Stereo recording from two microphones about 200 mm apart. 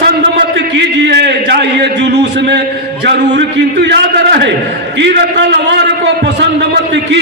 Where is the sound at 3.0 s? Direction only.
60° right (ahead or behind).